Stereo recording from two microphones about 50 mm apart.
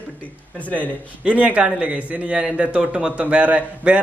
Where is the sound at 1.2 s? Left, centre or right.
Right.